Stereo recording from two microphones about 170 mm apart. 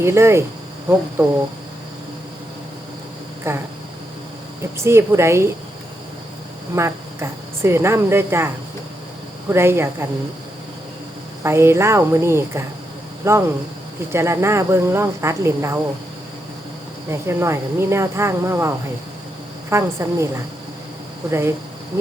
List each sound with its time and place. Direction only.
0.0 s speech: 15° right (ahead or behind)
3.5 s speech: 15° right (ahead or behind)
4.8 s speech: 15° right (ahead or behind)
6.7 s speech: 15° right (ahead or behind)
9.5 s speech: 15° right (ahead or behind)
11.4 s speech: 15° right (ahead or behind)
17.1 s speech: 15° right (ahead or behind)
19.7 s speech: 15° right (ahead or behind)